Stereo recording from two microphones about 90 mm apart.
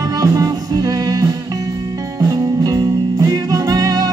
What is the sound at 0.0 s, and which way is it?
Music, 45° right (ahead or behind).